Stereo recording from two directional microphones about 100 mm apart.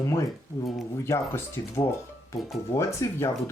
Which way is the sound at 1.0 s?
25° left (ahead or behind).